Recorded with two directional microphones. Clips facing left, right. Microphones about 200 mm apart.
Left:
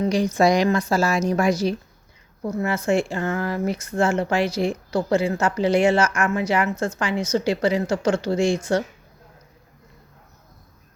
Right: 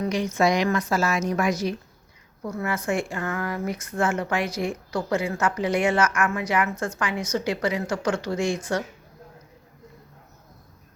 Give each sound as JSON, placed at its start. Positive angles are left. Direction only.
{"t": 0.0, "sound": "a woman's voice", "side_deg": 35}